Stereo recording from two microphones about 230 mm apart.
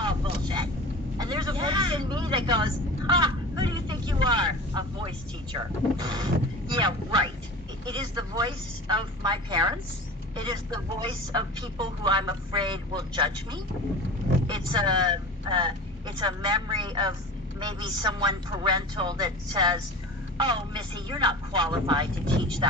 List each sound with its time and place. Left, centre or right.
0.0 s vehicle: centre
6.7 s a woman's voice: centre